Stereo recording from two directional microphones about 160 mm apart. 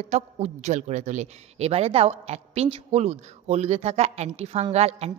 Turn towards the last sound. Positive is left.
turn(degrees=-40)  # may be behind; listen again after turning